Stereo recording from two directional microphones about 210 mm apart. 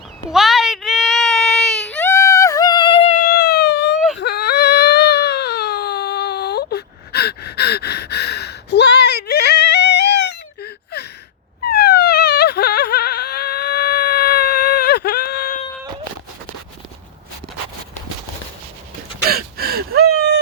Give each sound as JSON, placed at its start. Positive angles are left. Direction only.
{"t": 0.3, "sound": "baby cry", "side_deg": 0}
{"t": 11.6, "sound": "a sound", "side_deg": 50}
{"t": 19.3, "sound": "gasp", "side_deg": -45}